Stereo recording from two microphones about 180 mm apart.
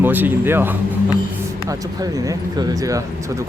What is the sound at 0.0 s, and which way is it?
Speech, 10° right (ahead or behind).